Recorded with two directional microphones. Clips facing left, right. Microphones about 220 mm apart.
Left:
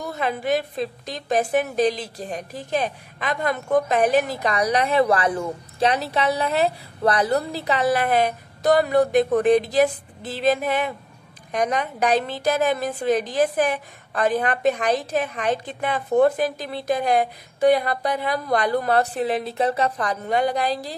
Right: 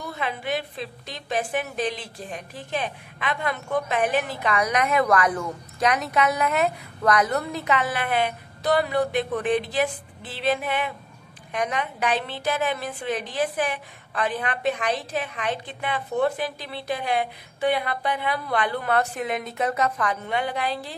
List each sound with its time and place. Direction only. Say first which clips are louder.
0.0 s a woman's voice: left 5 dB; 45° left (ahead or behind)